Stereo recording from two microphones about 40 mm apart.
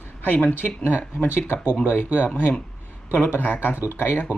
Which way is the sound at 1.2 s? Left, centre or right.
Left.